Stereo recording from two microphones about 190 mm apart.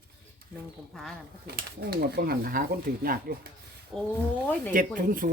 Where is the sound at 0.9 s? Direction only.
Centre (ahead or behind).